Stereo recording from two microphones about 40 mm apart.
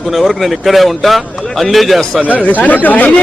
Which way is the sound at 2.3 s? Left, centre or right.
Left.